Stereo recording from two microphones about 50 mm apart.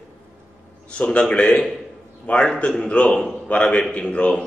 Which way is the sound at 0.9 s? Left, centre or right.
Left.